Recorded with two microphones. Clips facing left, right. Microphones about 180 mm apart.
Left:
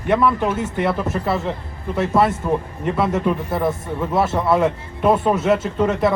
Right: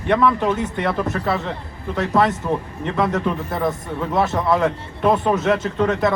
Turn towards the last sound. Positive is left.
turn(degrees=10)  # may be behind; listen again after turning